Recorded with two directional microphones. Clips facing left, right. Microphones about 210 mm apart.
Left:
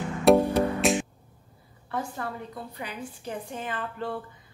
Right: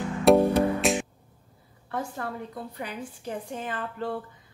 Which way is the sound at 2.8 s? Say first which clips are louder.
Right 1 dB; 45° right (ahead or behind).